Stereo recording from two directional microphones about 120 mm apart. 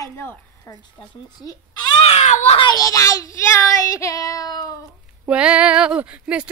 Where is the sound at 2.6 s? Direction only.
35° left (ahead or behind).